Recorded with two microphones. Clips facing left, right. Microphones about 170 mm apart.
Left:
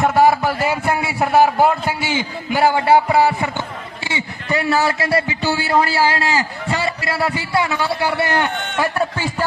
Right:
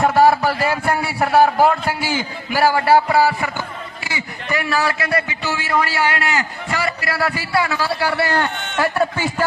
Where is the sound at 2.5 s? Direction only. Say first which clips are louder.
Left 1 dB; 20° left (ahead or behind).